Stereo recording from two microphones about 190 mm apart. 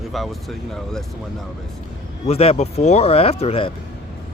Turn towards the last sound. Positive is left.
turn(degrees=30)  # may be behind; listen again after turning